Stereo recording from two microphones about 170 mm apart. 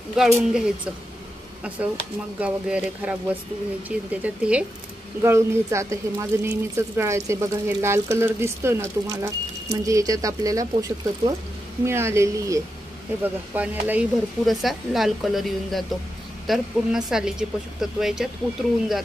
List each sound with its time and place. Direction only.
0.1 s speech: 5° right (ahead or behind)
2.4 s speech: 5° right (ahead or behind)